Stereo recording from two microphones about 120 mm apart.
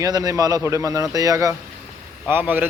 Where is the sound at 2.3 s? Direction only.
15° right (ahead or behind).